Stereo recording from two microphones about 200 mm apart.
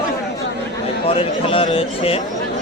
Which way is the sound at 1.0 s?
25° left (ahead or behind).